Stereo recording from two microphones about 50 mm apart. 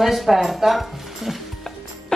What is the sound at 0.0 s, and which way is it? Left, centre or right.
Speech, centre.